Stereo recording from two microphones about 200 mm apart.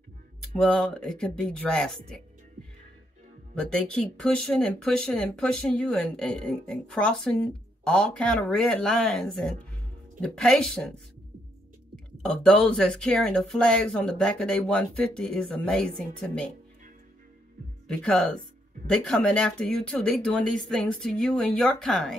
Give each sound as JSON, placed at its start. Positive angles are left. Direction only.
{"t": 0.6, "sound": "speech", "side_deg": 5}
{"t": 3.5, "sound": "speech", "side_deg": 5}
{"t": 12.2, "sound": "speech", "side_deg": 5}
{"t": 17.8, "sound": "speech", "side_deg": 5}